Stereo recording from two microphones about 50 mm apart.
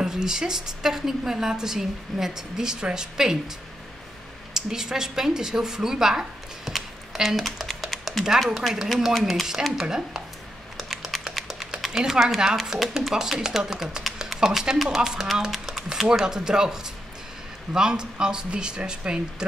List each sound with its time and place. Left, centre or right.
0.0 s a woman's voice: centre
4.6 s speech: centre
10.8 s computer keyboard: centre
11.3 s a sound: centre
11.9 s a woman's voice: centre